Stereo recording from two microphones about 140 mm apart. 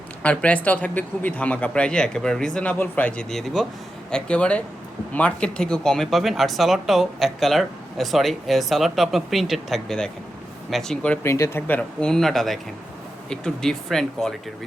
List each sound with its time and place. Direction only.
0.2 s speech: 10° left (ahead or behind)